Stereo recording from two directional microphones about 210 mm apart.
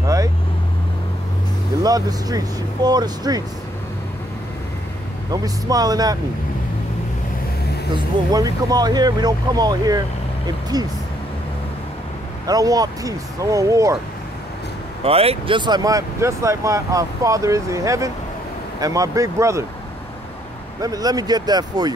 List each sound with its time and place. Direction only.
0.0 s vehicle: 15° right (ahead or behind)
1.8 s speech: 20° right (ahead or behind)
5.3 s speech: 15° right (ahead or behind)
7.9 s speech: 20° right (ahead or behind)
12.4 s speech: 15° right (ahead or behind)
15.0 s speech: 25° right (ahead or behind)
20.8 s speech: 15° right (ahead or behind)